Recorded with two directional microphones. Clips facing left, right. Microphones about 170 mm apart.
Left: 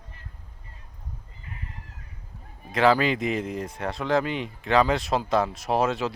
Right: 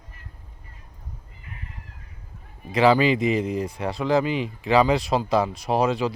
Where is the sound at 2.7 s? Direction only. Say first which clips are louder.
Right 3 dB; centre (ahead or behind).